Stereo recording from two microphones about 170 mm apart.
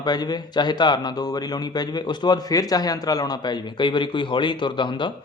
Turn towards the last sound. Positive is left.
turn(degrees=30)  # may be behind; listen again after turning